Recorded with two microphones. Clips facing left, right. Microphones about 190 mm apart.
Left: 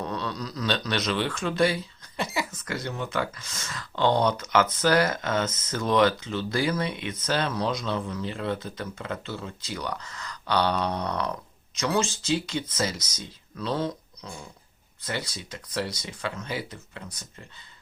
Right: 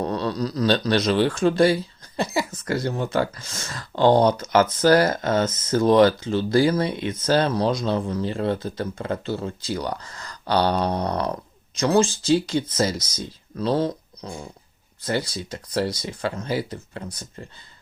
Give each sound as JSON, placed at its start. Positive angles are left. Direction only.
{"t": 0.0, "sound": "speech", "side_deg": -35}